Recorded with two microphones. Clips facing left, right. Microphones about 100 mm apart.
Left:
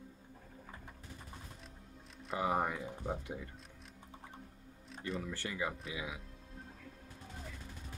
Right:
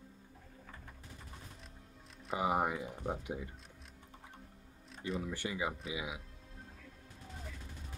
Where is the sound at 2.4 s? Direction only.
15° right (ahead or behind).